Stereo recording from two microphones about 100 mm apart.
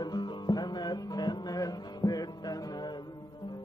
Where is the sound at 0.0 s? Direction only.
45° left (ahead or behind).